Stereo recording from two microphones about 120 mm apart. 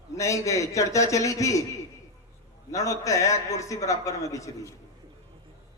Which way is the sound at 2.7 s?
30° left (ahead or behind).